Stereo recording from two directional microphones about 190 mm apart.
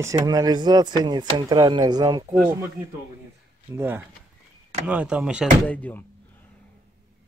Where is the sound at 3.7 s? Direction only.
10° right (ahead or behind).